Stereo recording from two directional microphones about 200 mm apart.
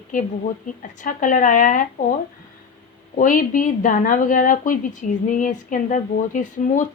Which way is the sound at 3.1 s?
40° left (ahead or behind).